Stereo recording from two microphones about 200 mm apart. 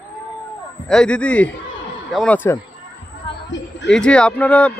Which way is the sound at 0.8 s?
5° left (ahead or behind).